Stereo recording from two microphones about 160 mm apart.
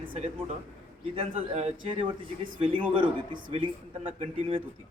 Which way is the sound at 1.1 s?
40° right (ahead or behind).